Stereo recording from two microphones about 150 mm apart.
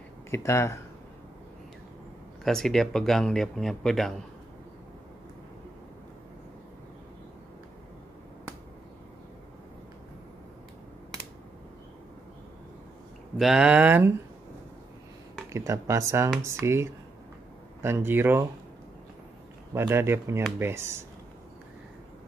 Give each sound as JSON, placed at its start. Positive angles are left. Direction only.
{"t": 0.3, "sound": "speech", "side_deg": 15}
{"t": 2.4, "sound": "speech", "side_deg": 0}
{"t": 13.4, "sound": "speech", "side_deg": -5}
{"t": 15.5, "sound": "speech", "side_deg": -20}
{"t": 19.7, "sound": "speech", "side_deg": -15}